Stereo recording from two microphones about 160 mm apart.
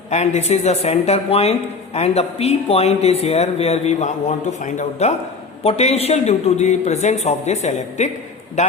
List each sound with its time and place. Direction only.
0.1 s a woman's voice: 45° left (ahead or behind)